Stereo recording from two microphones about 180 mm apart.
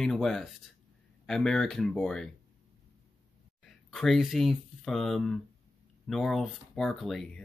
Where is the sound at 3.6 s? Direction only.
Centre (ahead or behind).